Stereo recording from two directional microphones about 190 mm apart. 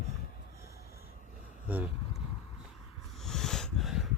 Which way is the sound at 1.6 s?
10° right (ahead or behind).